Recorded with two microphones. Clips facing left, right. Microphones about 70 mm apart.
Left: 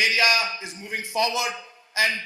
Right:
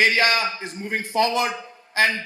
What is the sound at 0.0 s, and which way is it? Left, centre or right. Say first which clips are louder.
A man's voice: right 3 dB; right.